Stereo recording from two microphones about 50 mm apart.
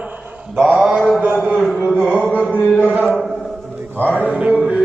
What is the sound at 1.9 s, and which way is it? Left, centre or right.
Music, right.